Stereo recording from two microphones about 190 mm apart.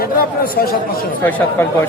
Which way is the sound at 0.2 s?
50° left (ahead or behind).